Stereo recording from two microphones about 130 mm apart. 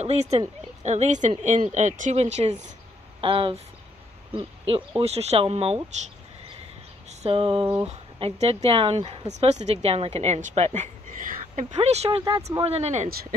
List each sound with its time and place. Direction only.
0.0 s speech: 55° right (ahead or behind)
3.2 s speech: 45° right (ahead or behind)
7.1 s a sound: 45° right (ahead or behind)
7.8 s speech: 55° right (ahead or behind)
11.8 s speech: 55° right (ahead or behind)
12.4 s speech: 25° right (ahead or behind)
12.6 s speech: 55° right (ahead or behind)